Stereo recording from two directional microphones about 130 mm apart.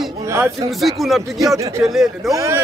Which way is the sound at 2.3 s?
25° right (ahead or behind).